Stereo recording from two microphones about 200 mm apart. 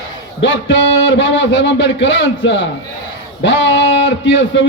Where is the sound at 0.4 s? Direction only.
70° left (ahead or behind).